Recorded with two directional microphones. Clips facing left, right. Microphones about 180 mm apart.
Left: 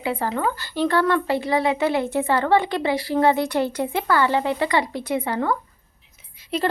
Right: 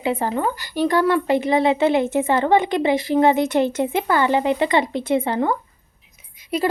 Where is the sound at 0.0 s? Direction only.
20° right (ahead or behind).